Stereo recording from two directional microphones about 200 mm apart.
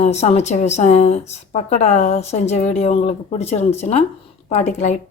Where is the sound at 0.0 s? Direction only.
35° left (ahead or behind).